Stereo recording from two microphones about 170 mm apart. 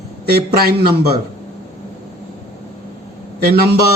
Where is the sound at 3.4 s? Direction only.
65° right (ahead or behind).